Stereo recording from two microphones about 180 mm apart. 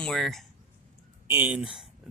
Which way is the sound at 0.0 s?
Centre (ahead or behind).